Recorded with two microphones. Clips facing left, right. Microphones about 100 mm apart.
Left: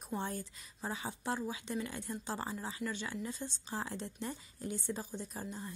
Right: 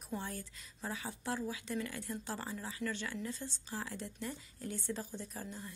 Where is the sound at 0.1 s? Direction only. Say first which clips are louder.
Left 3 dB; 25° left (ahead or behind).